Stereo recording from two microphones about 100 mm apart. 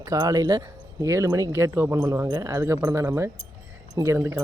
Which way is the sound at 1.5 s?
25° right (ahead or behind).